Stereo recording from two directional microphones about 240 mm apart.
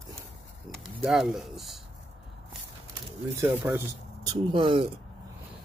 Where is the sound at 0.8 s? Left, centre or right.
Centre.